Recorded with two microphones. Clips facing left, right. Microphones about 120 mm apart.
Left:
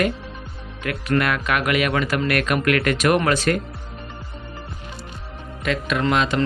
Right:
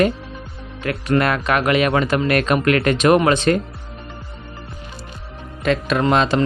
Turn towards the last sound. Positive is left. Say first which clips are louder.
# right 4 dB
turn(degrees=-30)  # may be behind; listen again after turning